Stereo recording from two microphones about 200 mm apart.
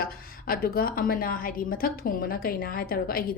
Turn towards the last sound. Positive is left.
turn(degrees=45)  # may be behind; listen again after turning